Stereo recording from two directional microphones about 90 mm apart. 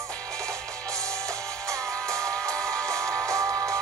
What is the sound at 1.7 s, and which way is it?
Music, 35° right (ahead or behind).